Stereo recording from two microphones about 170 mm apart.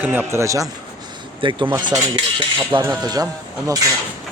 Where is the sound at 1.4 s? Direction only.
30° right (ahead or behind).